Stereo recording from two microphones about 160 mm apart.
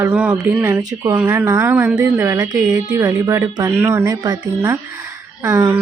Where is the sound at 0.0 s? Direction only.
10° right (ahead or behind).